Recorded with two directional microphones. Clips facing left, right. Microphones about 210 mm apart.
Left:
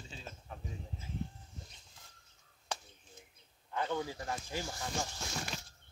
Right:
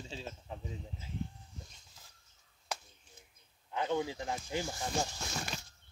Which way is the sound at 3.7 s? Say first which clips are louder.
Right 3 dB; 20° right (ahead or behind).